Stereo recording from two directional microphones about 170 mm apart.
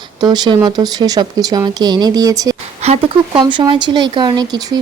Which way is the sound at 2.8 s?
35° right (ahead or behind).